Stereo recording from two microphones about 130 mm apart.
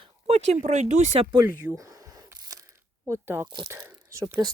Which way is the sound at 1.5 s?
25° right (ahead or behind).